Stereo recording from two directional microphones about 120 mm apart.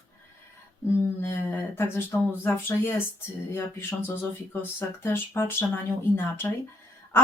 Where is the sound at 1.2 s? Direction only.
20° left (ahead or behind).